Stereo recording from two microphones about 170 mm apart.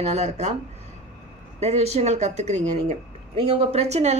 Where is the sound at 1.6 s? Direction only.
40° right (ahead or behind).